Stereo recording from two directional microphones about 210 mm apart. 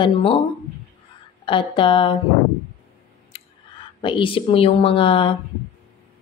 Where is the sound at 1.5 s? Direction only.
25° left (ahead or behind).